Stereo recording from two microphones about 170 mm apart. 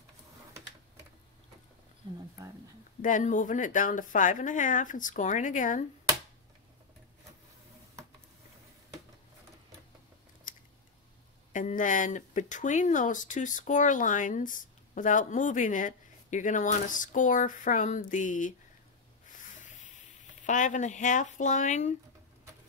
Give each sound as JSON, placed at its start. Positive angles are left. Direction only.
{"t": 3.0, "sound": "speech", "side_deg": 50}
{"t": 10.5, "sound": "scissors", "side_deg": 50}
{"t": 11.5, "sound": "speech", "side_deg": 50}
{"t": 19.2, "sound": "a sound", "side_deg": 45}
{"t": 20.4, "sound": "speech", "side_deg": 50}